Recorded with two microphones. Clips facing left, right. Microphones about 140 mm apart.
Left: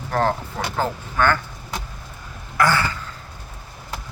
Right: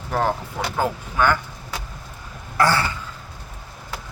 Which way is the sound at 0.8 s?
10° right (ahead or behind).